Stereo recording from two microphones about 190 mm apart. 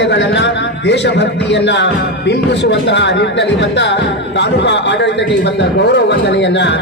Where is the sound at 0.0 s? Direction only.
65° left (ahead or behind).